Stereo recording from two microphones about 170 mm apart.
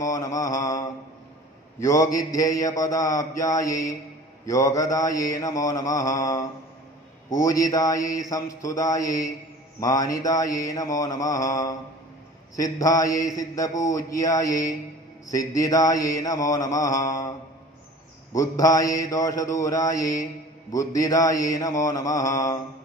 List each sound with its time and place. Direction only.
0.0 s mantra: 20° left (ahead or behind)
18.3 s mantra: 20° left (ahead or behind)